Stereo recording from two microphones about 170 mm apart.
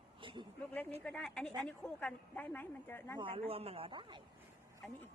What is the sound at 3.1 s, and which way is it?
Speech, 30° right (ahead or behind).